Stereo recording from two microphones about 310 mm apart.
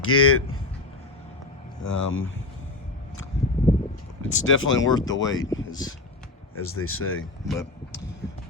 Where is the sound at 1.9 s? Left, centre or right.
Left.